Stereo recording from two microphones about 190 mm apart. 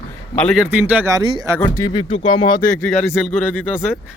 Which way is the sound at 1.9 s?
25° left (ahead or behind).